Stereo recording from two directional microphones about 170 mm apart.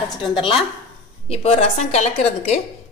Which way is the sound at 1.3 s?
35° left (ahead or behind).